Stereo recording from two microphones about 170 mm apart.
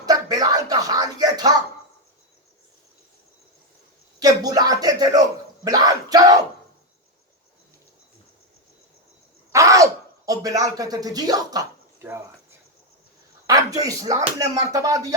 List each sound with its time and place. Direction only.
0.0 s music: 20° right (ahead or behind)
4.2 s a sound: 25° right (ahead or behind)
5.6 s speech: 20° right (ahead or behind)
9.5 s speech: 20° right (ahead or behind)
13.5 s speech: 20° right (ahead or behind)